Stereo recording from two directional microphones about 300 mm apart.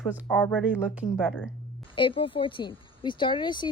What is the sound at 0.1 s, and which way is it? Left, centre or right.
Speech, centre.